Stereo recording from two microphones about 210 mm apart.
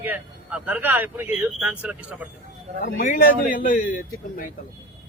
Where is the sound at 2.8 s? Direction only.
45° left (ahead or behind).